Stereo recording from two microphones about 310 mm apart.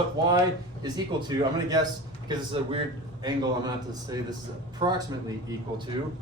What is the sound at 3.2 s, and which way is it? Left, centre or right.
Speech, centre.